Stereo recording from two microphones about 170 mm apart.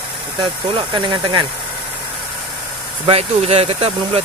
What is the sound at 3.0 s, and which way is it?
Speech, 35° right (ahead or behind).